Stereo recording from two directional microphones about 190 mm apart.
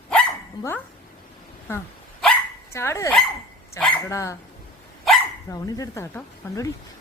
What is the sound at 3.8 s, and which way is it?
Speech, 15° left (ahead or behind).